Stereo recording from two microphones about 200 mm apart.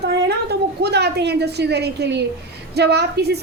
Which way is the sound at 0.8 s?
55° right (ahead or behind).